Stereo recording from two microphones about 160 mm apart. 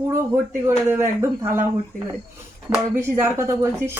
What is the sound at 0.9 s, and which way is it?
Speech, 15° right (ahead or behind).